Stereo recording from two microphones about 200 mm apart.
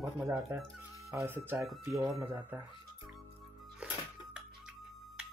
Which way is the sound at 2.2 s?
10° right (ahead or behind).